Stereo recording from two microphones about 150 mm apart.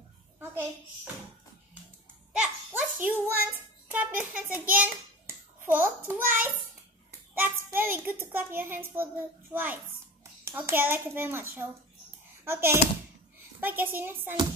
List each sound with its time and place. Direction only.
2.3 s a child's voice: 10° right (ahead or behind)
7.1 s a sound: 15° right (ahead or behind)
8.3 s a child's voice: 10° right (ahead or behind)